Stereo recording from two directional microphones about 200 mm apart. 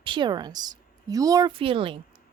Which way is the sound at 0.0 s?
25° right (ahead or behind).